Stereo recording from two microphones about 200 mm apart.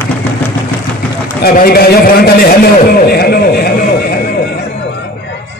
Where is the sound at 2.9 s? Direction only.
50° left (ahead or behind).